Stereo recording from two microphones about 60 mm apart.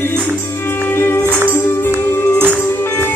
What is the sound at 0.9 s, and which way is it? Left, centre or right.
Music, left.